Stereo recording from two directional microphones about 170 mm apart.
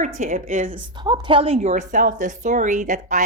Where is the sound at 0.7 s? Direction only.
30° right (ahead or behind).